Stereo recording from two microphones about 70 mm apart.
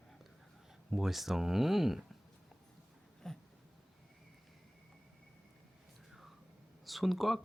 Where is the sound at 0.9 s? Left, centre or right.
Centre.